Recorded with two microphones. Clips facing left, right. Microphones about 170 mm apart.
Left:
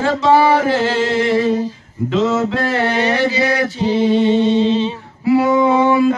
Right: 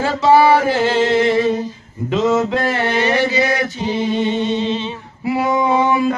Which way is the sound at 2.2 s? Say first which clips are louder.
Right 4 dB; 15° right (ahead or behind).